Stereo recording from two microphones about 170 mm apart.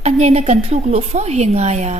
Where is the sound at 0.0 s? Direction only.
40° right (ahead or behind).